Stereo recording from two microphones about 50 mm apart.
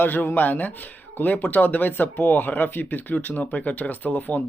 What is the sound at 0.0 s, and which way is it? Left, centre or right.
Speech, left.